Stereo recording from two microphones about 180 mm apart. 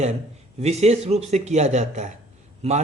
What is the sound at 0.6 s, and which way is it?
A man's voice, 35° right (ahead or behind).